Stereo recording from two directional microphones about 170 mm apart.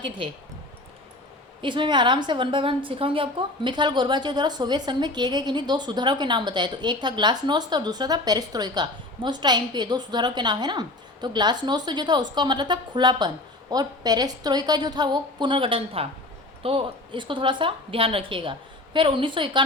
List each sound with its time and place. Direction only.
1.6 s a woman's voice: 30° right (ahead or behind)